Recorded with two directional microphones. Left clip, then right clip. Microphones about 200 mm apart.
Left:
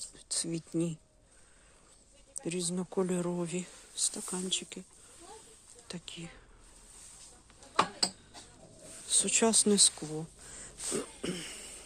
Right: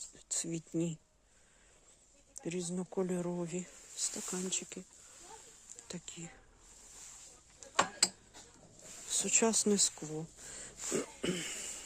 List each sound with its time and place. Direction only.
0.3 s speech: 15° right (ahead or behind)
2.4 s speech: 10° right (ahead or behind)
5.9 s speech: 10° right (ahead or behind)
9.0 s speech: 15° right (ahead or behind)
10.5 s a sound: 25° right (ahead or behind)